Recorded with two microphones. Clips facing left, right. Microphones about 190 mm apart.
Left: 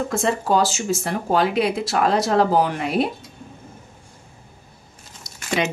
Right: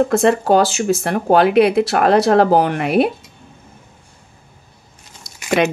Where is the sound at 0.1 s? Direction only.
65° right (ahead or behind).